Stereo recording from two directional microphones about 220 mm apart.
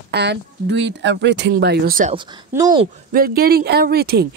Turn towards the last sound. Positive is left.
turn(degrees=-45)  # may be behind; listen again after turning